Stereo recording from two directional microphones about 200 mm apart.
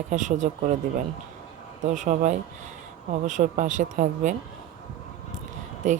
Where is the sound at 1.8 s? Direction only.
40° right (ahead or behind).